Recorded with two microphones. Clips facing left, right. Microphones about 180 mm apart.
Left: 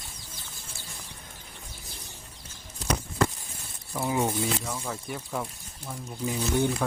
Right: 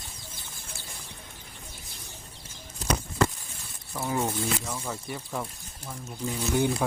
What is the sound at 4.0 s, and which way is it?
Speech, 10° left (ahead or behind).